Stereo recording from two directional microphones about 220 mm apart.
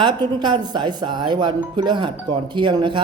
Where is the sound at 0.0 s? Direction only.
20° right (ahead or behind).